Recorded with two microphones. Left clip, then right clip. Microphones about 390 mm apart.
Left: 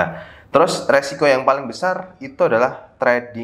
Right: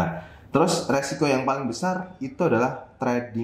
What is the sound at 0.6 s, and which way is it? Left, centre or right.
Speech, left.